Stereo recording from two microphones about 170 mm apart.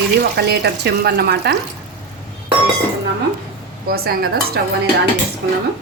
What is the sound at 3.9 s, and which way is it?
Speech, 65° right (ahead or behind).